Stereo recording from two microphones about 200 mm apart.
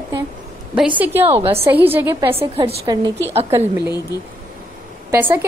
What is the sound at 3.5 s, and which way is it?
Speech, 10° right (ahead or behind).